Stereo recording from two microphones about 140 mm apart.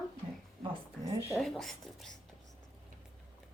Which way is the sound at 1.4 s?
Centre (ahead or behind).